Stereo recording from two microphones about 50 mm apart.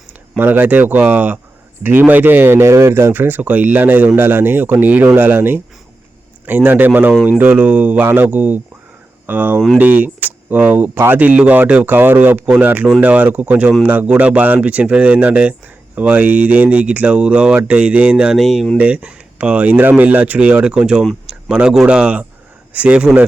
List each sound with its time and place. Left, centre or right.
0.3 s speech: right
2.6 s speech: right
3.1 s speech: right
10.9 s speech: right
11.2 s speech: right
11.9 s speech: right
13.5 s speech: right
18.3 s speech: centre
18.8 s speech: right
21.2 s a sound: centre
21.8 s speech: right